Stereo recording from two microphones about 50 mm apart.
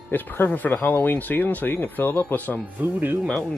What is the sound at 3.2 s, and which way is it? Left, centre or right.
Speech, centre.